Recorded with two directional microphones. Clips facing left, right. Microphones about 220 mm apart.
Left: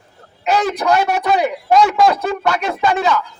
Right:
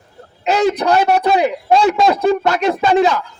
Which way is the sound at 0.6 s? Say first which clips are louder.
Right 5 dB; 30° right (ahead or behind).